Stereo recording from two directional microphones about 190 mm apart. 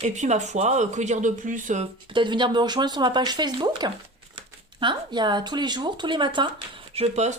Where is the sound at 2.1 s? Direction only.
25° right (ahead or behind).